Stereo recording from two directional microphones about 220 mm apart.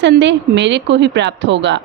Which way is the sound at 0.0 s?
55° right (ahead or behind).